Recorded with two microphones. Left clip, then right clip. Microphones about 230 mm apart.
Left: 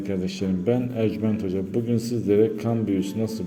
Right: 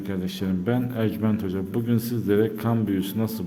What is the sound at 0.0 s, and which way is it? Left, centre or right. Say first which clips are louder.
A man's voice: left 3 dB; centre.